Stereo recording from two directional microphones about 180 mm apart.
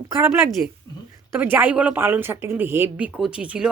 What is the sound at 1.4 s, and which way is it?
Speech, 10° right (ahead or behind).